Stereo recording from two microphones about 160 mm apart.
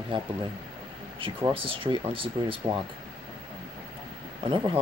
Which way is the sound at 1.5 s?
35° right (ahead or behind).